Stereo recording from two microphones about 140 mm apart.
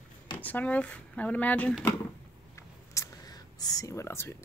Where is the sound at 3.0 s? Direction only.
25° left (ahead or behind).